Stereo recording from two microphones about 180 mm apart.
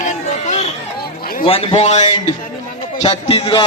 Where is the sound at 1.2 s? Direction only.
55° left (ahead or behind).